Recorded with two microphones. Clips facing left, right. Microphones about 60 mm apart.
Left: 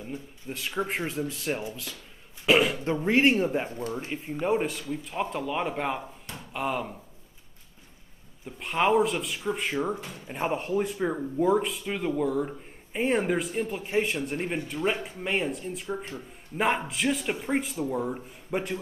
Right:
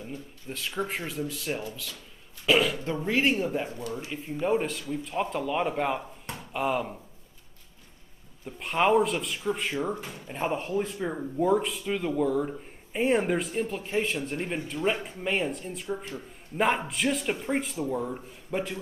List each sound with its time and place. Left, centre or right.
0.1 s a man's voice: centre; by 4.1 s left
4.1 s speech: centre
8.5 s speech: centre